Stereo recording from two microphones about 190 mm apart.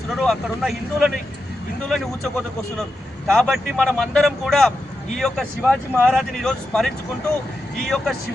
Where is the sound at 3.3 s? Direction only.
Centre (ahead or behind).